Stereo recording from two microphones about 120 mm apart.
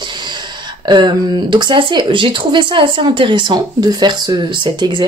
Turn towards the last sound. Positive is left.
turn(degrees=-40)  # may be behind; listen again after turning